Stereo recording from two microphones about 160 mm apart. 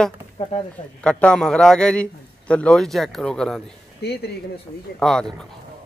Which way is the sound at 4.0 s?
90° left.